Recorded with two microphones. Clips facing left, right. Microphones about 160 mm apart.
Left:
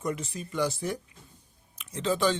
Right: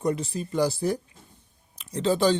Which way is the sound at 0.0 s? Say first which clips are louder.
Right 6 dB; 35° right (ahead or behind).